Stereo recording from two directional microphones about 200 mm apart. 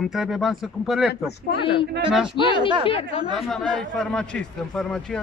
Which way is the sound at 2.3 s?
25° left (ahead or behind).